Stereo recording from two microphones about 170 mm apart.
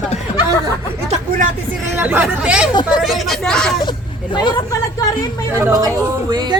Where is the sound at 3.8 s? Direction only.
25° left (ahead or behind).